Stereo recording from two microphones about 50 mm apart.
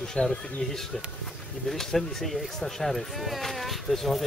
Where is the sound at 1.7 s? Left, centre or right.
Centre.